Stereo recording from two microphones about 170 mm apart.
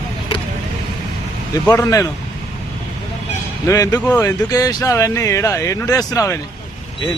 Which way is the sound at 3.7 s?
20° left (ahead or behind).